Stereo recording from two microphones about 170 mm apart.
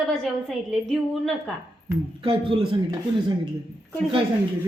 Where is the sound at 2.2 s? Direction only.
30° right (ahead or behind).